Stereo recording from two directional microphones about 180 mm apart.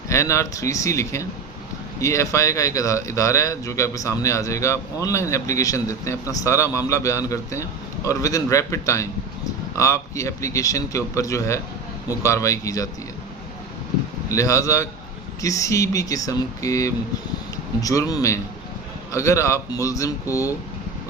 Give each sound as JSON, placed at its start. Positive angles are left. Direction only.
{"t": 0.1, "sound": "speech", "side_deg": 15}
{"t": 14.3, "sound": "speech", "side_deg": 15}